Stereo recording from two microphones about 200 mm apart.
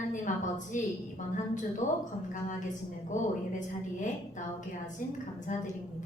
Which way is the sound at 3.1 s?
40° left (ahead or behind).